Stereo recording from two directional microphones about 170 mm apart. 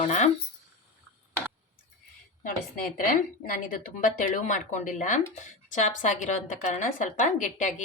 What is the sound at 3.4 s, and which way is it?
A woman's voice, 50° left (ahead or behind).